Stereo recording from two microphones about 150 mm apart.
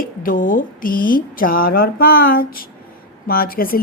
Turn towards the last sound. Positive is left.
turn(degrees=75)  # may be behind; listen again after turning